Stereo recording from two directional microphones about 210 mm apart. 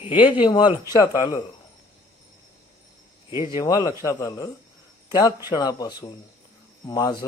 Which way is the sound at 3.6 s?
15° left (ahead or behind).